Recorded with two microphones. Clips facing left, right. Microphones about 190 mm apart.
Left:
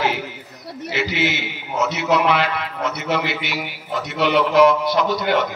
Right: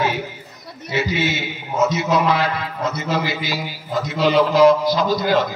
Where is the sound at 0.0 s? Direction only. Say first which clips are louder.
Right 1 dB; 70° left (ahead or behind).